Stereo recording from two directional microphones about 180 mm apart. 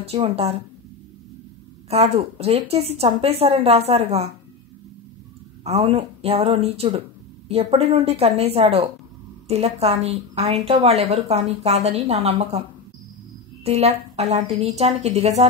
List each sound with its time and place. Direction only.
0.0 s speech: 35° right (ahead or behind)
1.9 s speech: 35° right (ahead or behind)
5.6 s speech: 35° right (ahead or behind)
13.7 s speech: 35° right (ahead or behind)